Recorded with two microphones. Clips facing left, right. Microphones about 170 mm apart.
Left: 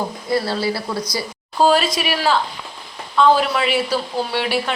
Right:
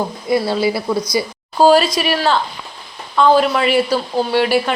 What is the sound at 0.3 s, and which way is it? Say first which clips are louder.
Speech: right 4 dB; 15° right (ahead or behind).